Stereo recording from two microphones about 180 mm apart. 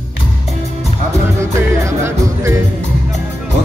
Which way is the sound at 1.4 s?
15° right (ahead or behind).